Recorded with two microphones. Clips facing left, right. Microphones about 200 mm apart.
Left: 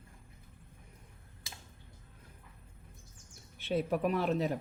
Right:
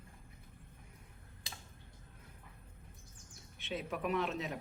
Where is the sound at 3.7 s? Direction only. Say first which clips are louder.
Left 7 dB; 40° left (ahead or behind).